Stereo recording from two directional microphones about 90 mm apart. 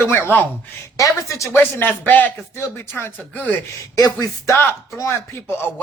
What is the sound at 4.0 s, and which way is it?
Speech, 40° left (ahead or behind).